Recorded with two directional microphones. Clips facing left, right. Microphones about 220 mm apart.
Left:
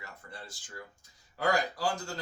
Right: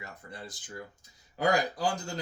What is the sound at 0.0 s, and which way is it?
Speech, 20° right (ahead or behind).